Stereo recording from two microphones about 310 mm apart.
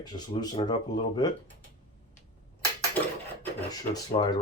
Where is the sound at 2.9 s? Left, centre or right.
Centre.